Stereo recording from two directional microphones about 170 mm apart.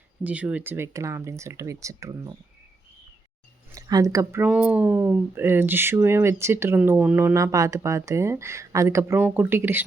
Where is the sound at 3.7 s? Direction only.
20° right (ahead or behind).